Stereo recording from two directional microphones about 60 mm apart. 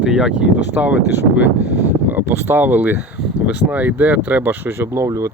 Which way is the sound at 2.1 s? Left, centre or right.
Right.